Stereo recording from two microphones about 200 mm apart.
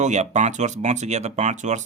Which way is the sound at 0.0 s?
35° right (ahead or behind).